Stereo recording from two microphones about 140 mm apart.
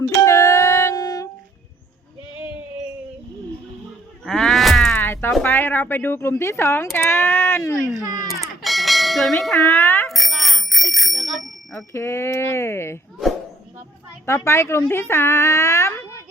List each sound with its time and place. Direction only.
0.2 s music: 20° left (ahead or behind)
4.3 s a sound: 5° left (ahead or behind)
4.9 s music: 15° left (ahead or behind)
5.4 s speech: 15° left (ahead or behind)
8.0 s a child's voice: 25° right (ahead or behind)
8.3 s bell: centre (ahead or behind)
10.1 s bicycle bell: centre (ahead or behind)
11.7 s speech: 20° left (ahead or behind)
14.3 s speech: 20° left (ahead or behind)